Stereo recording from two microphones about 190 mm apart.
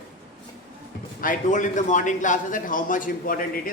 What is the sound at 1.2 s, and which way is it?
A man's voice, 45° left (ahead or behind).